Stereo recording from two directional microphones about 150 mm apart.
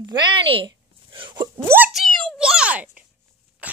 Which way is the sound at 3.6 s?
10° right (ahead or behind).